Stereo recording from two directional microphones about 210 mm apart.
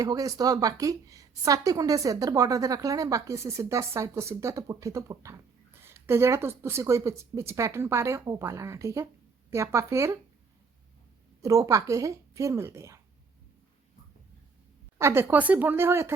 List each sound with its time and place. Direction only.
0.0 s a woman's voice: 15° right (ahead or behind)
11.4 s a woman's voice: 15° right (ahead or behind)
14.9 s a woman's voice: 10° right (ahead or behind)